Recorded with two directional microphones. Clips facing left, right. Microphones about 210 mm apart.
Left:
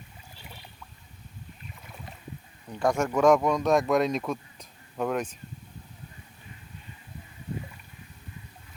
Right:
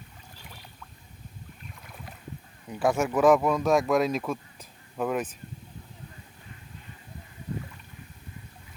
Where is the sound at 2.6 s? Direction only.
5° right (ahead or behind).